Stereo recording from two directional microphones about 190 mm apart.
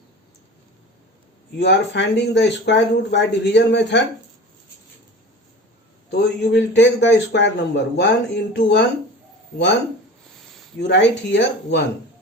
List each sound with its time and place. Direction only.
1.5 s a man's voice: 65° left (ahead or behind)
6.1 s a man's voice: 60° left (ahead or behind)
10.8 s a man's voice: 65° left (ahead or behind)